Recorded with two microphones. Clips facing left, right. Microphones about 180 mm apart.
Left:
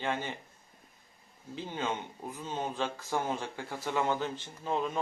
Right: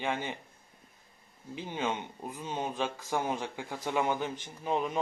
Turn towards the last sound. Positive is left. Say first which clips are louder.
# right 1 dB
turn(degrees=-15)  # may be behind; listen again after turning